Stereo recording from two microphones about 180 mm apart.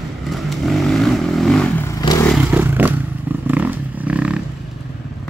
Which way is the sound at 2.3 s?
10° right (ahead or behind).